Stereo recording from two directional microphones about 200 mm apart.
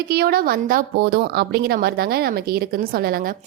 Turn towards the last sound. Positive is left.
turn(degrees=-50)  # may be behind; listen again after turning